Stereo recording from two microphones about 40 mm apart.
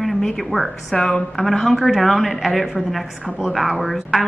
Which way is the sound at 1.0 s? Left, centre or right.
Left.